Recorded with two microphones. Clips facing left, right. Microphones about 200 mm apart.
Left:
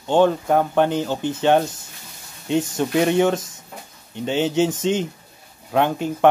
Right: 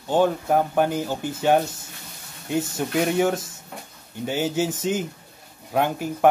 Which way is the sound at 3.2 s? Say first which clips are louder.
Left 3 dB; 5° right (ahead or behind).